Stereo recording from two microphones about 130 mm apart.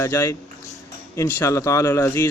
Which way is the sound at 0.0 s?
20° left (ahead or behind).